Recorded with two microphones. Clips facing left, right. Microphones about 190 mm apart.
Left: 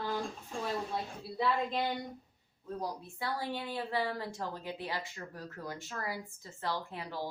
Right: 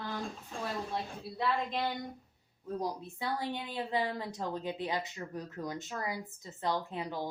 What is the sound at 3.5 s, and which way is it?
Speech, 20° right (ahead or behind).